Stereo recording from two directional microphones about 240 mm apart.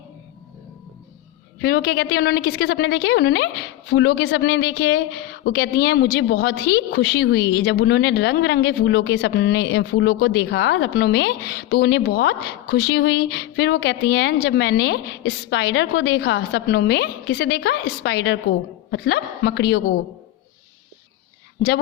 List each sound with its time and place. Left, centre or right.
1.6 s a woman's voice: left